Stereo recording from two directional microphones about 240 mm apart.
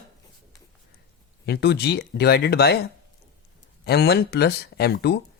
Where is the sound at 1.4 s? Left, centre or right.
Left.